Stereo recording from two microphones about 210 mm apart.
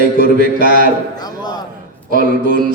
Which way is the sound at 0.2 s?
40° right (ahead or behind).